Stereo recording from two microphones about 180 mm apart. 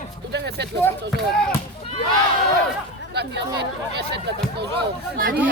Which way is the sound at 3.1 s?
70° right (ahead or behind).